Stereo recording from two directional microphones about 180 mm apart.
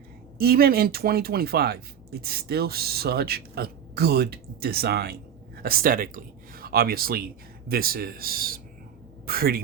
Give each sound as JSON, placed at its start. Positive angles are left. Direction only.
{"t": 0.3, "sound": "speech", "side_deg": -60}